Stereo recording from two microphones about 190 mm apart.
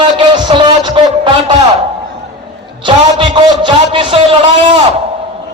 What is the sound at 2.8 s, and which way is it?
A man's voice, 25° right (ahead or behind).